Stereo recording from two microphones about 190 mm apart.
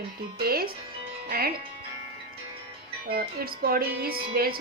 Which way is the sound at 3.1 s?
55° right (ahead or behind).